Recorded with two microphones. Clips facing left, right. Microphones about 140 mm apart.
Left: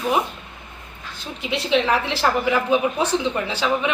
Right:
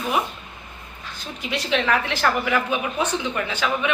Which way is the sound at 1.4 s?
25° left (ahead or behind).